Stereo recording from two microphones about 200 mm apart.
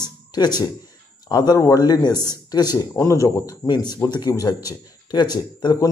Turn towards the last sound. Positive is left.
turn(degrees=20)  # may be behind; listen again after turning